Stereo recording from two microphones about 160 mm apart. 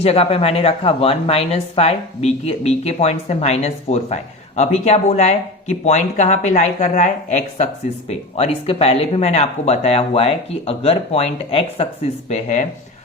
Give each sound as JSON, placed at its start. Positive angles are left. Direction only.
{"t": 0.0, "sound": "speech", "side_deg": 40}
{"t": 12.3, "sound": "speech", "side_deg": 50}